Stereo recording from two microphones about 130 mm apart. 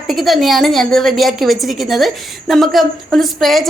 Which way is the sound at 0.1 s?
Centre (ahead or behind).